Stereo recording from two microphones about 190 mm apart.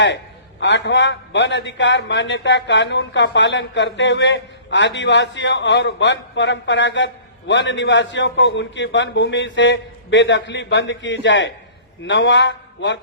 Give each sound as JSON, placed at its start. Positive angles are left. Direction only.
{"t": 0.6, "sound": "a man's voice", "side_deg": 70}